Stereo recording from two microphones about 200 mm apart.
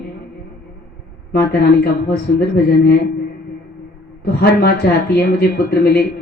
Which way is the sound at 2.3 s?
55° left (ahead or behind).